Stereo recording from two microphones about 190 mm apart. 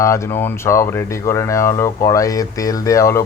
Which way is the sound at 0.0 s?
15° left (ahead or behind).